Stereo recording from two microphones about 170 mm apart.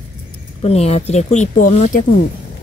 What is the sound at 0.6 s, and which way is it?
Speech, 35° left (ahead or behind).